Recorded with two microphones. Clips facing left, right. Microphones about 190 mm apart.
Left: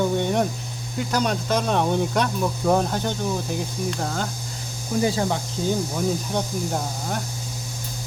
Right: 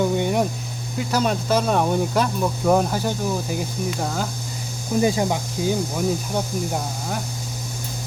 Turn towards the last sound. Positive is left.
turn(degrees=-10)  # may be behind; listen again after turning